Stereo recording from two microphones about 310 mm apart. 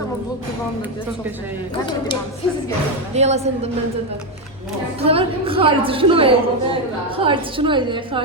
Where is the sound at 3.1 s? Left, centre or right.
Right.